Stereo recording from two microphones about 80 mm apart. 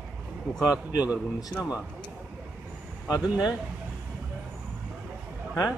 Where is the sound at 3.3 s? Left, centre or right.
Centre.